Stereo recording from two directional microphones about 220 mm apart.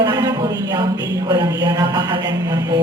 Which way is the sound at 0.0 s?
20° right (ahead or behind).